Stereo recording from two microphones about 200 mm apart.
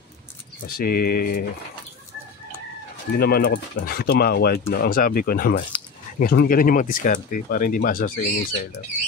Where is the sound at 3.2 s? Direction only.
50° left (ahead or behind).